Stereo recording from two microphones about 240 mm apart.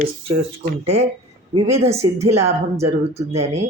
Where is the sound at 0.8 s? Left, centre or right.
Right.